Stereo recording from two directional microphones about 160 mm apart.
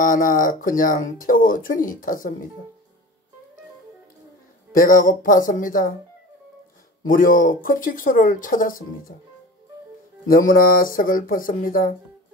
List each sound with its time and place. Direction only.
0.0 s speech: 60° left (ahead or behind)
4.7 s speech: 60° left (ahead or behind)
7.1 s speech: 60° left (ahead or behind)
10.2 s speech: 60° left (ahead or behind)